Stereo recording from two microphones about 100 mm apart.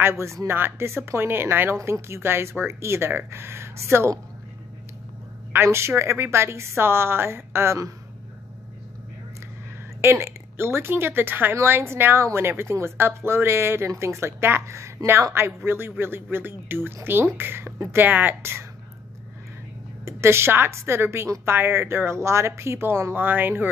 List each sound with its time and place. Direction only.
0.0 s a woman's voice: 25° right (ahead or behind)
5.5 s a woman's voice: 25° right (ahead or behind)
10.0 s a woman's voice: 25° right (ahead or behind)
20.1 s a woman's voice: 25° right (ahead or behind)